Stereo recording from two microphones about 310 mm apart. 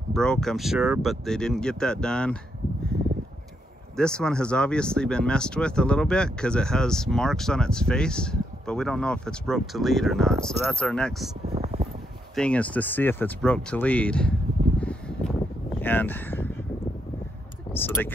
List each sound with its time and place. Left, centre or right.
0.1 s speech: centre
3.9 s speech: centre
11.5 s a sound: centre
12.4 s speech: centre
14.8 s a sound: centre
17.7 s speech: centre